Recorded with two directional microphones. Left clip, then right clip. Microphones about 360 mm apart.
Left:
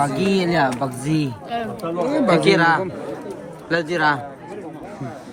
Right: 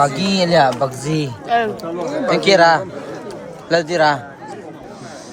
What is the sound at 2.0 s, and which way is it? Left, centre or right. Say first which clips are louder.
Speech: left 1 dB; left.